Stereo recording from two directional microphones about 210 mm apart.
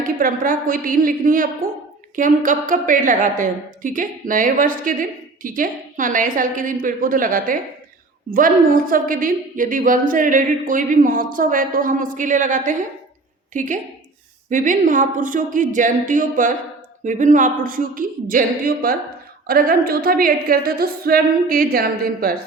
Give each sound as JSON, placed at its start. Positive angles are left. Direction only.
{"t": 0.0, "sound": "a woman's voice", "side_deg": -40}